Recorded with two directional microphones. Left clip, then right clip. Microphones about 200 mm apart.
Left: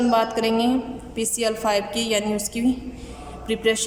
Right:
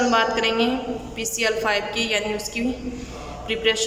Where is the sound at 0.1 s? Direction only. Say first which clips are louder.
Right 1 dB; 25° left (ahead or behind).